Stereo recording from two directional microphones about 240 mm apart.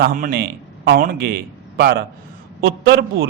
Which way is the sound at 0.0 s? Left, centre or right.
Right.